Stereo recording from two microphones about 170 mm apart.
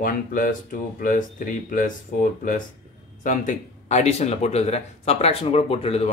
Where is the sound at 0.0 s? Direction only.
55° left (ahead or behind).